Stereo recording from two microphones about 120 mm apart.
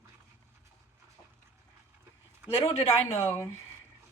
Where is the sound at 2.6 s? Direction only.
55° left (ahead or behind).